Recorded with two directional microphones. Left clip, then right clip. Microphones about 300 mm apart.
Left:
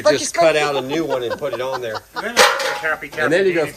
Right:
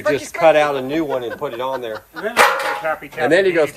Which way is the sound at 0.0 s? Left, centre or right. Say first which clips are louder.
Left 4 dB; centre.